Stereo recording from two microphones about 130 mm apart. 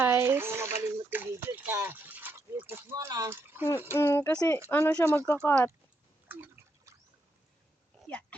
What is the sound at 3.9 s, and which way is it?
Speech, 20° left (ahead or behind).